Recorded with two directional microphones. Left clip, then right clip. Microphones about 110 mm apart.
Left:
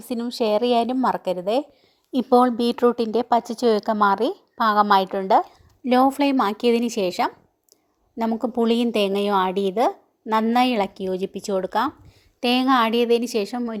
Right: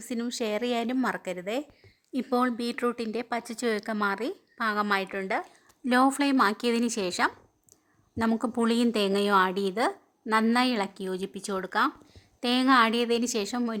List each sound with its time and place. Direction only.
0.3 s a woman's voice: 20° left (ahead or behind)
5.5 s a sound: 25° left (ahead or behind)
6.1 s speech: 25° left (ahead or behind)
8.5 s a woman's voice: 15° left (ahead or behind)